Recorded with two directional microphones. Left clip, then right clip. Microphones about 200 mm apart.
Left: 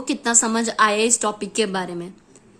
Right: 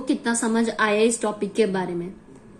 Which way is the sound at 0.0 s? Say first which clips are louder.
Left 3 dB; 45° left (ahead or behind).